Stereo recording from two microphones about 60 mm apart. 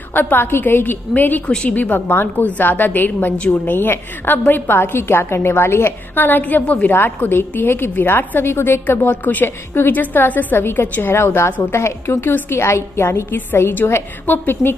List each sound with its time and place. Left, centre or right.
0.1 s a woman's voice: left
1.5 s a woman's voice: centre
1.8 s a woman's voice: left